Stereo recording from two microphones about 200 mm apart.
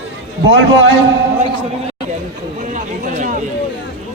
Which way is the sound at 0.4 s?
65° right (ahead or behind).